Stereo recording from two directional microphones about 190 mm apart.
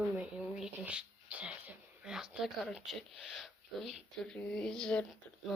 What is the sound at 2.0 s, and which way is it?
Speech, 5° right (ahead or behind).